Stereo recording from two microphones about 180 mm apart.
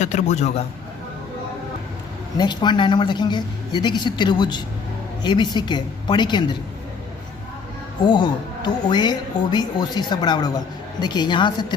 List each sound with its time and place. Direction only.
0.0 s a man's voice: 40° left (ahead or behind)
2.4 s speech: 25° left (ahead or behind)
8.0 s speech: 25° left (ahead or behind)